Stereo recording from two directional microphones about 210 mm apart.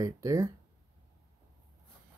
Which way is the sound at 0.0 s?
15° right (ahead or behind).